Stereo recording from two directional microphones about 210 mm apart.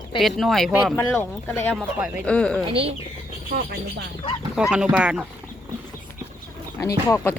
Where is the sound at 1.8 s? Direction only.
Centre (ahead or behind).